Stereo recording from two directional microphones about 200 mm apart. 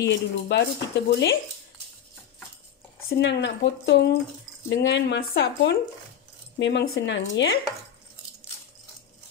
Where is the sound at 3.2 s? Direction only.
65° left (ahead or behind).